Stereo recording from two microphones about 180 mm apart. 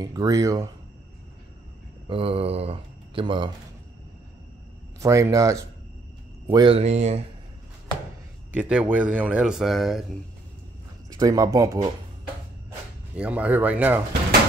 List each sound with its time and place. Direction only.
0.0 s speech: 20° right (ahead or behind)
2.0 s speech: 30° right (ahead or behind)
5.0 s speech: 15° right (ahead or behind); by 7.2 s 40° right (ahead or behind)
8.5 s speech: 5° right (ahead or behind)
11.1 s speech: 20° right (ahead or behind)
13.1 s speech: 5° right (ahead or behind)